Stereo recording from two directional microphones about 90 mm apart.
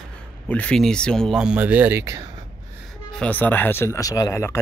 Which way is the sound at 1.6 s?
20° right (ahead or behind).